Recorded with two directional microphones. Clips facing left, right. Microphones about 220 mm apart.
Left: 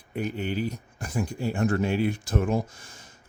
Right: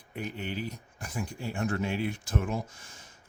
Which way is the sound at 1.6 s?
40° left (ahead or behind).